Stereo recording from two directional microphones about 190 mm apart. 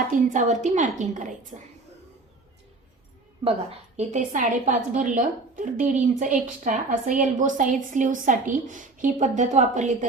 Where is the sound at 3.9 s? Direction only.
40° right (ahead or behind).